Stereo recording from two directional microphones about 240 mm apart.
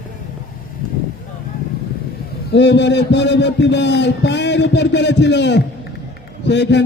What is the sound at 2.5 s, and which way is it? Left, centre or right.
A man's voice, left.